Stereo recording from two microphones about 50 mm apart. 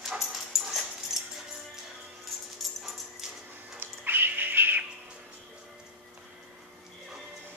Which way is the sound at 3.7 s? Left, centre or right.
Right.